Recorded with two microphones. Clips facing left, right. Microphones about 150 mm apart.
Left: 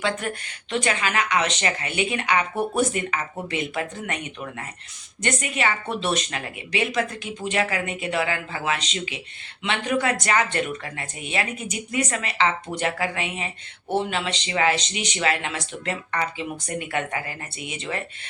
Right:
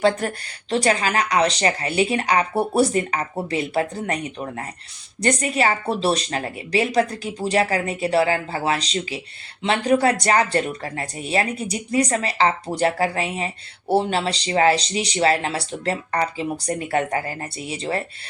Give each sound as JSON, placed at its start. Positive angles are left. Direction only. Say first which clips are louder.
{"t": 0.0, "sound": "speech", "louder": "right 7 dB", "side_deg": -35}